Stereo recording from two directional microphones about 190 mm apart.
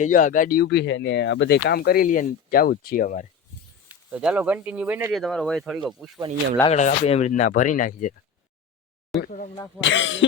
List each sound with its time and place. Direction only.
0.0 s speech: 45° left (ahead or behind)
3.8 s speech: 5° right (ahead or behind)
5.1 s speech: centre (ahead or behind)
6.7 s speech: 35° left (ahead or behind)
9.1 s speech: centre (ahead or behind)
9.8 s speech: 75° left (ahead or behind)